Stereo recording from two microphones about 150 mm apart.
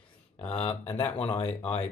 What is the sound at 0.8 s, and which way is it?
Speech, 15° left (ahead or behind).